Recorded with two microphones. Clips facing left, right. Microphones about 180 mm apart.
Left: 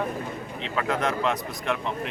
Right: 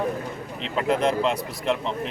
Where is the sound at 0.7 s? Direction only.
30° right (ahead or behind).